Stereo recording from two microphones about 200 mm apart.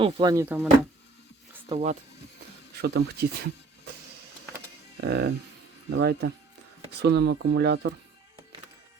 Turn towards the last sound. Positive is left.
turn(degrees=-60)  # may be behind; listen again after turning